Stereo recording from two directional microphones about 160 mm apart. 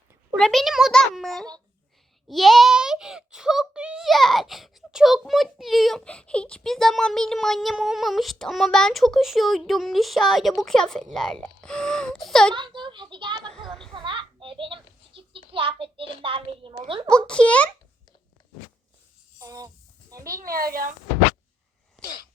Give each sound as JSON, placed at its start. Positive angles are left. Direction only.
{"t": 0.3, "sound": "a child's voice", "side_deg": 5}
{"t": 12.5, "sound": "speech", "side_deg": -30}
{"t": 13.9, "sound": "a sound", "side_deg": -30}
{"t": 16.2, "sound": "a woman's voice", "side_deg": -35}
{"t": 17.1, "sound": "a child's voice", "side_deg": 5}
{"t": 19.4, "sound": "a sound", "side_deg": -20}
{"t": 20.2, "sound": "speech", "side_deg": -65}